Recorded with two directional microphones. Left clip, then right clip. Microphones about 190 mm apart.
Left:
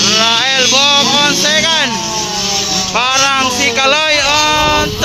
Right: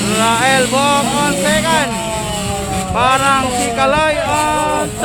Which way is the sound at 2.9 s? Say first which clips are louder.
Even; 5° left (ahead or behind).